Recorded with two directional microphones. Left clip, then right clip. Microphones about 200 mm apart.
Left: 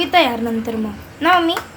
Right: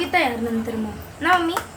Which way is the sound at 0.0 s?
25° left (ahead or behind).